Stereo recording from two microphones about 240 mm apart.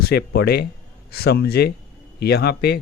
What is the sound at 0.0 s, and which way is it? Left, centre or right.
Speech, left.